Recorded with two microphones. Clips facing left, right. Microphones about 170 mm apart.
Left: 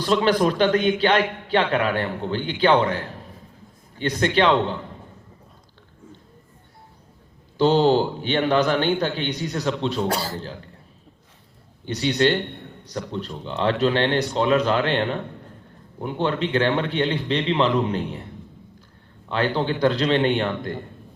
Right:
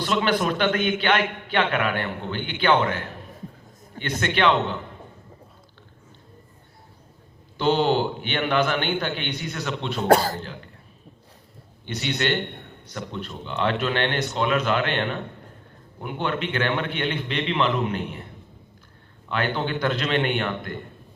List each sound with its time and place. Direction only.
0.0 s a man's voice: 35° left (ahead or behind)
7.6 s a man's voice: 35° left (ahead or behind)
10.1 s speech: 50° right (ahead or behind)
11.9 s a man's voice: 35° left (ahead or behind)
19.3 s a man's voice: 30° left (ahead or behind)